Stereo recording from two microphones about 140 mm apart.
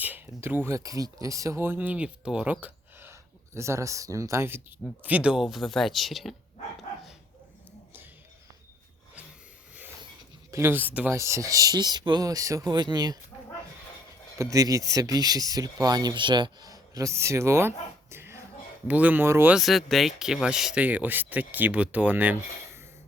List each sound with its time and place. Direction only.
0.0 s speech: 15° right (ahead or behind)
10.5 s speech: 15° right (ahead or behind)
14.5 s speech: 25° right (ahead or behind)
19.5 s speech: centre (ahead or behind)